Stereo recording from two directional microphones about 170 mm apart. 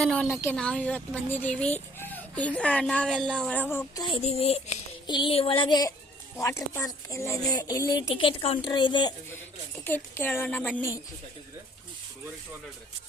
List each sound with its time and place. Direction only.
0.0 s speech: 5° left (ahead or behind)
4.0 s a sound: 35° left (ahead or behind)
5.0 s speech: 25° left (ahead or behind)
9.8 s speech: 10° left (ahead or behind)